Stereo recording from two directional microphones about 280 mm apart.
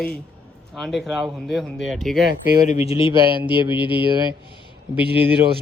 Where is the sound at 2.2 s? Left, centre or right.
Left.